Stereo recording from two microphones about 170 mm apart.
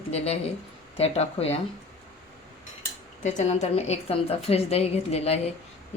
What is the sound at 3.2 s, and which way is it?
A woman's voice, 40° left (ahead or behind).